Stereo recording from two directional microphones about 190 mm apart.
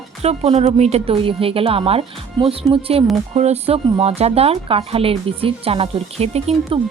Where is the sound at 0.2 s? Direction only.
35° right (ahead or behind).